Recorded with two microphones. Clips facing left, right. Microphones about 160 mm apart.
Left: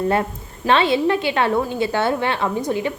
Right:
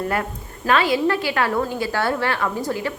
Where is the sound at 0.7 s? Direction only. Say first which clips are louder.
Left 2 dB; 25° left (ahead or behind).